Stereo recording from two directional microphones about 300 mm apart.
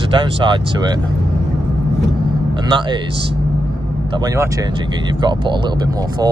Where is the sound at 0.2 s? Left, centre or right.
Centre.